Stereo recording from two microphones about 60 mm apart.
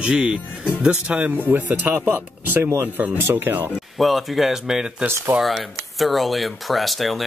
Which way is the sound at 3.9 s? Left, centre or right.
Centre.